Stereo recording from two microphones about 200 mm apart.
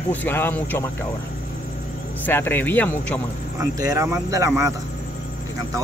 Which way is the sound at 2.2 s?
10° left (ahead or behind).